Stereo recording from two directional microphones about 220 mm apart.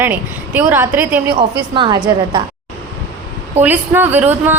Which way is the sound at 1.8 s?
20° right (ahead or behind).